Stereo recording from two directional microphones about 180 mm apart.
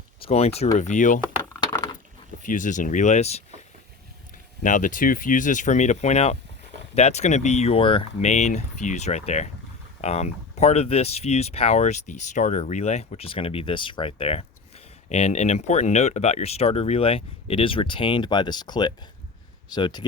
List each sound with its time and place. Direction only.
0.2 s speech: 35° left (ahead or behind)
1.4 s a sound: 15° left (ahead or behind)
2.4 s speech: 45° left (ahead or behind)
4.6 s speech: 45° left (ahead or behind); by 20.1 s 25° left (ahead or behind)